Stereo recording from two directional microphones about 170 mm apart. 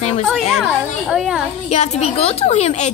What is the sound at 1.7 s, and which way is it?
Speech, 40° left (ahead or behind).